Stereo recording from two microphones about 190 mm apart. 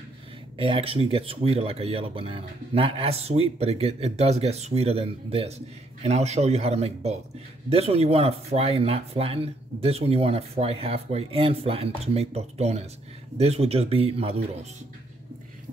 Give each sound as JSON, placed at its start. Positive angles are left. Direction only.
{"t": 0.6, "sound": "speech", "side_deg": -30}